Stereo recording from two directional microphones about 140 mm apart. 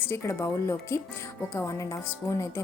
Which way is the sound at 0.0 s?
20° left (ahead or behind).